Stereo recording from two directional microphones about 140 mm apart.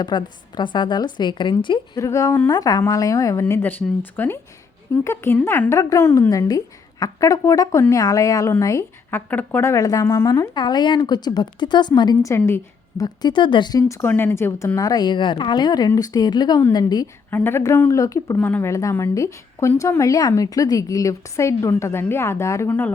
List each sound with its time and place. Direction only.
0.0 s a woman's voice: 30° left (ahead or behind)
2.0 s speech: 25° left (ahead or behind)
3.5 s speech: 15° left (ahead or behind); by 12.3 s 30° left (ahead or behind)
12.3 s a woman's voice: 20° left (ahead or behind)
13.2 s speech: 35° left (ahead or behind)
17.3 s speech: 15° left (ahead or behind)